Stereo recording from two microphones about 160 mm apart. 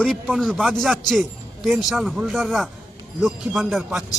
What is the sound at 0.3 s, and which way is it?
Speech, 5° left (ahead or behind).